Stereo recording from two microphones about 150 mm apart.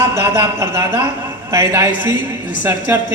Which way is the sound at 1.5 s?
20° right (ahead or behind).